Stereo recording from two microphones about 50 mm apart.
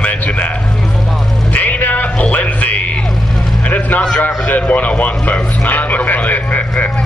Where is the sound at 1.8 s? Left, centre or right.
Left.